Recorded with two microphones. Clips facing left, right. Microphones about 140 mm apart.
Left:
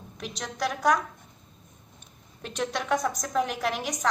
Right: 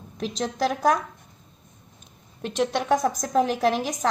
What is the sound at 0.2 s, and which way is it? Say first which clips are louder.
Speech: right 6 dB; 30° right (ahead or behind).